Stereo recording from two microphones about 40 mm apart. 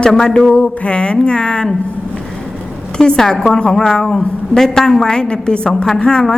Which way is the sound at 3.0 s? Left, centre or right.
Centre.